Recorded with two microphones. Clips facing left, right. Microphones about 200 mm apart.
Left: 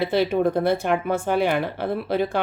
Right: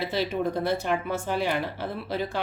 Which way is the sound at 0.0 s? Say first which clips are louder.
Left 7 dB; 55° left (ahead or behind).